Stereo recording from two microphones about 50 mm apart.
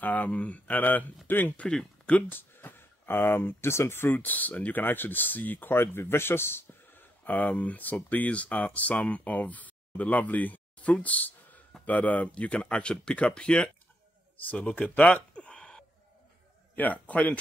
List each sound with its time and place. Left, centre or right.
0.0 s speech: left
1.6 s speech: centre
2.2 s speech: left
4.1 s speech: left
14.5 s speech: left
16.7 s speech: left